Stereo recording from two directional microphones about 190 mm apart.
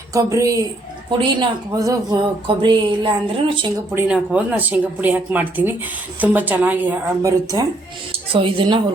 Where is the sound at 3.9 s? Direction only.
5° right (ahead or behind).